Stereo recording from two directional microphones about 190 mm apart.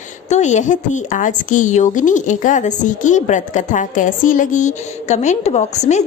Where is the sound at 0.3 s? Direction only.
40° left (ahead or behind).